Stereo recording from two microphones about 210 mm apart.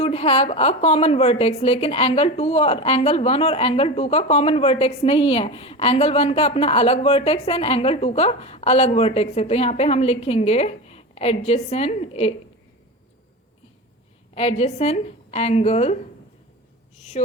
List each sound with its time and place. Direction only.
0.0 s a woman's voice: 30° left (ahead or behind)
14.3 s a woman's voice: 30° left (ahead or behind)